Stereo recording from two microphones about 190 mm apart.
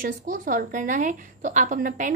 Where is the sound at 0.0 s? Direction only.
45° right (ahead or behind).